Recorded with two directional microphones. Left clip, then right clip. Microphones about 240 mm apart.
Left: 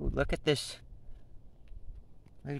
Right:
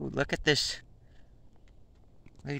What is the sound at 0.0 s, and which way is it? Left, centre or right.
Speech, centre.